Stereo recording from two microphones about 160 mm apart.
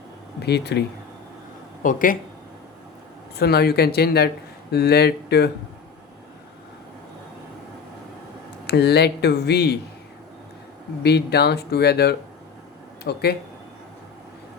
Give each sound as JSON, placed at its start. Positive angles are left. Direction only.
{"t": 0.4, "sound": "speech", "side_deg": 90}
{"t": 1.8, "sound": "speech", "side_deg": 55}
{"t": 3.3, "sound": "speech", "side_deg": 80}
{"t": 8.6, "sound": "speech", "side_deg": 90}
{"t": 11.0, "sound": "speech", "side_deg": 90}